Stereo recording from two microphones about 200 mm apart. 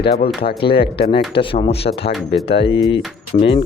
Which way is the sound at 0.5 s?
25° left (ahead or behind).